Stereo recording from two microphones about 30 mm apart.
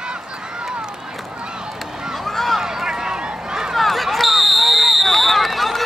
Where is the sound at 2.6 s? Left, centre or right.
Centre.